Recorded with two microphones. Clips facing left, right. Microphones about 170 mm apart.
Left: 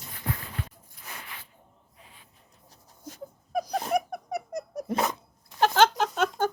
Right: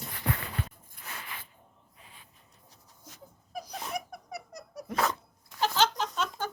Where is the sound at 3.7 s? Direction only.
40° left (ahead or behind).